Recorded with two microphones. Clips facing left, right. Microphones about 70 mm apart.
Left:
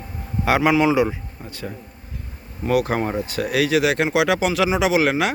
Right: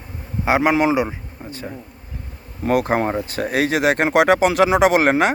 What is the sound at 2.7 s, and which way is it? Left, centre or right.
Speech, right.